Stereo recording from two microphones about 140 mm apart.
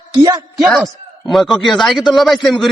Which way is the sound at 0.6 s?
Centre (ahead or behind).